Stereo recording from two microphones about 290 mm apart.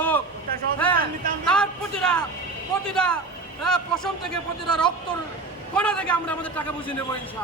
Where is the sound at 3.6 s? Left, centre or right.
Centre.